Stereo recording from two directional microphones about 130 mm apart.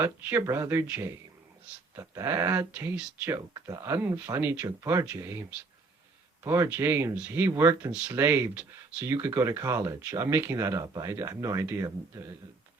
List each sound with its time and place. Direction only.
0.0 s speech: 15° right (ahead or behind)
5.0 s speech: 10° right (ahead or behind)
6.4 s speech: 20° right (ahead or behind)